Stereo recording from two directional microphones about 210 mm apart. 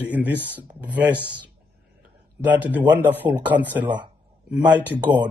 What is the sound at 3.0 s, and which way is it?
Speech, 10° right (ahead or behind).